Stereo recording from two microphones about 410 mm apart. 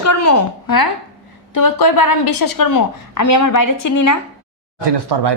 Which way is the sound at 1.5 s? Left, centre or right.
Left.